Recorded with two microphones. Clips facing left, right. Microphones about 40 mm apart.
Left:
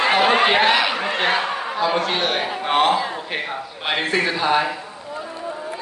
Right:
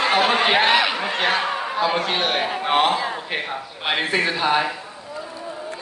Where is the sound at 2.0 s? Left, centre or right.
Centre.